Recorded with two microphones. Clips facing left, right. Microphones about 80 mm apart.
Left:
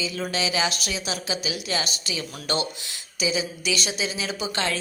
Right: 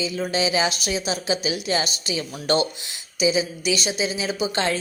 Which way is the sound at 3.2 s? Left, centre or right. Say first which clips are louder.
Right 5 dB; right.